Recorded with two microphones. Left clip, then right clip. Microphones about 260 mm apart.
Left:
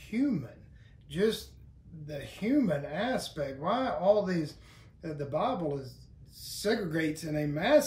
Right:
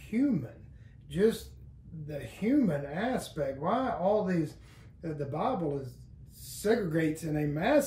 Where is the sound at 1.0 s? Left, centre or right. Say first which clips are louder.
Right 2 dB; centre.